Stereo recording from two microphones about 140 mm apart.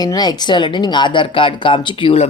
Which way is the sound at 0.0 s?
30° left (ahead or behind).